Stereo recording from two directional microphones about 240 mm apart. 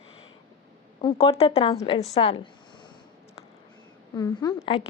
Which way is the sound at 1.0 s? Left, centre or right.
Left.